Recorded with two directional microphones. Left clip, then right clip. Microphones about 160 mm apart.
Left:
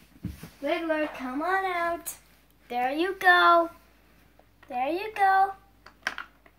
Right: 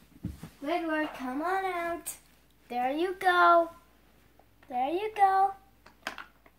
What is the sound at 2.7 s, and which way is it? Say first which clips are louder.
Speech: left 3 dB; 10° left (ahead or behind).